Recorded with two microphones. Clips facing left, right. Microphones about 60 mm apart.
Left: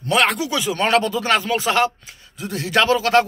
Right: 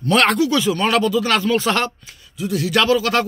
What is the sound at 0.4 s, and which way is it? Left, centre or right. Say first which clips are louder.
Speech: right 4 dB; left.